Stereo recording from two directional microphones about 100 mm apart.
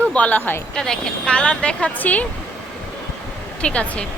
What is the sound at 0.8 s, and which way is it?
Speech, 5° left (ahead or behind).